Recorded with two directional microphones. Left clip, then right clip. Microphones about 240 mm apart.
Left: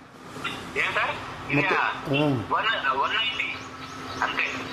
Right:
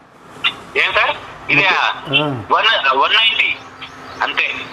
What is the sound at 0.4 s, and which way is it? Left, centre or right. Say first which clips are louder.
Telephone: right 11 dB; right.